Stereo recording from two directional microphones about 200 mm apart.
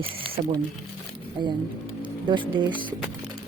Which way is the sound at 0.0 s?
25° right (ahead or behind).